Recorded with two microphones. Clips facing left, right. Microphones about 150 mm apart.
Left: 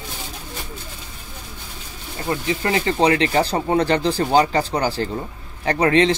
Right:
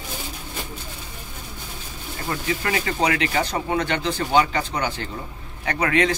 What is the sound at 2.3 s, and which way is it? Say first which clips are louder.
Speech: left 4 dB; 25° left (ahead or behind).